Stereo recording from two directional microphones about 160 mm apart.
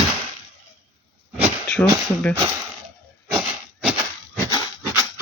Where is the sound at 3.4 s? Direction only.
5° right (ahead or behind).